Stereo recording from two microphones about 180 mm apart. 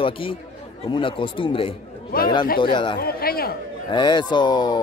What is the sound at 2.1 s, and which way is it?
Speech, 55° left (ahead or behind).